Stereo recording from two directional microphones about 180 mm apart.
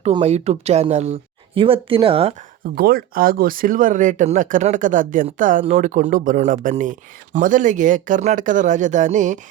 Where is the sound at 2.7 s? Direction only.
55° right (ahead or behind).